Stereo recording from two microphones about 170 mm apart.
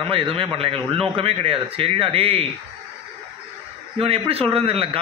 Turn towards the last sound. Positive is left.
turn(degrees=-35)  # may be behind; listen again after turning